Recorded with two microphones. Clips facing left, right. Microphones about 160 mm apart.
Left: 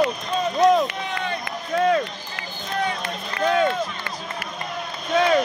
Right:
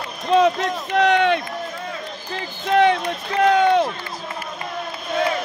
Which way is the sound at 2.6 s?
75° right (ahead or behind).